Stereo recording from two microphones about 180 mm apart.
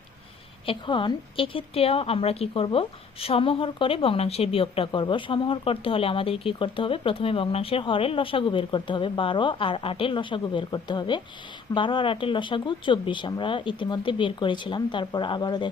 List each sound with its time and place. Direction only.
0.6 s a woman's voice: 30° left (ahead or behind)